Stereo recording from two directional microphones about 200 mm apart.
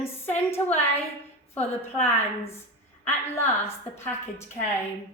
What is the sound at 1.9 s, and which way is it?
A woman's voice, 10° left (ahead or behind).